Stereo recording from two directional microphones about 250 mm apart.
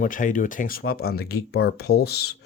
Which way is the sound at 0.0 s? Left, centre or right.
Left.